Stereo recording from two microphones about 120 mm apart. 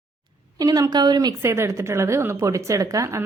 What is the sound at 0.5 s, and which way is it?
Speech, 30° right (ahead or behind).